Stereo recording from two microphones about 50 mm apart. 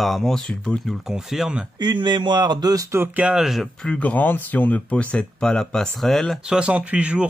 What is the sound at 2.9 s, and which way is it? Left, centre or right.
Speech, right.